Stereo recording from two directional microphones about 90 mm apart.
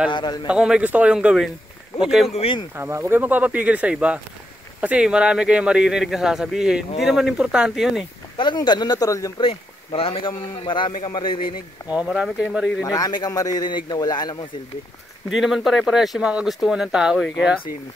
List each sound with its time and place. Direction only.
0.1 s a man's voice: 55° left (ahead or behind)
0.5 s speech: 10° right (ahead or behind)
2.7 s speech: 30° right (ahead or behind); by 8.0 s 5° right (ahead or behind)
8.4 s a man's voice: 55° left (ahead or behind); by 9.3 s 40° left (ahead or behind)
9.4 s a man's voice: 90° left; by 11.5 s 65° left (ahead or behind)
11.9 s speech: 15° right (ahead or behind)
12.8 s a man's voice: 45° left (ahead or behind)
15.2 s speech: centre (ahead or behind)